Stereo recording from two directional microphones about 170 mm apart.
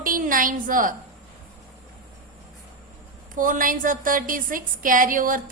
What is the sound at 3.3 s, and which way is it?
A woman's voice, 50° right (ahead or behind).